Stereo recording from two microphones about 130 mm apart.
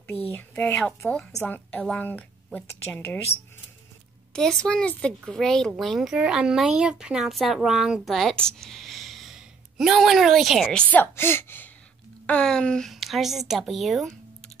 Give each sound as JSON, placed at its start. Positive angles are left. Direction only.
{"t": 0.3, "sound": "a woman's voice", "side_deg": 15}
{"t": 4.3, "sound": "a woman's voice", "side_deg": 5}